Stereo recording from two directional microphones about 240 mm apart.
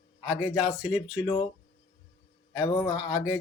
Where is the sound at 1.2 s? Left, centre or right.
Centre.